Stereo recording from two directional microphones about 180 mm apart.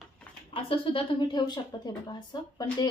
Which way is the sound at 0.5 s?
30° left (ahead or behind).